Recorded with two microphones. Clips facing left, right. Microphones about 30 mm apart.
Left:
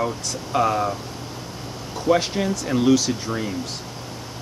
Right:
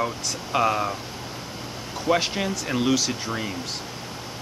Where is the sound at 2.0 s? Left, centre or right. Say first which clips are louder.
Left 3 dB; centre.